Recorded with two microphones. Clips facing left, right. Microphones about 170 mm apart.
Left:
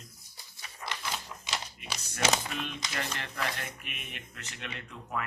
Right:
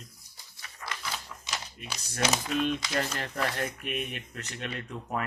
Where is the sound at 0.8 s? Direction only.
20° left (ahead or behind).